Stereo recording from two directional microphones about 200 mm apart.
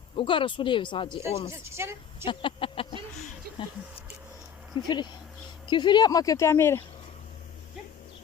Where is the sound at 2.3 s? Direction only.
25° left (ahead or behind).